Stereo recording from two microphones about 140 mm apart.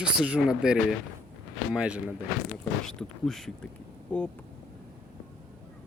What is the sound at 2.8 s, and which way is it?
Speech, 5° left (ahead or behind).